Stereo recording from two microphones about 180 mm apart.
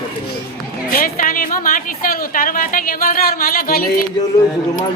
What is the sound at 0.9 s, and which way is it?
Speech, 50° left (ahead or behind).